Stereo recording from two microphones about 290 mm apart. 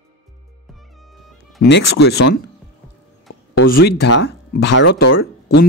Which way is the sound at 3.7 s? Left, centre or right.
Left.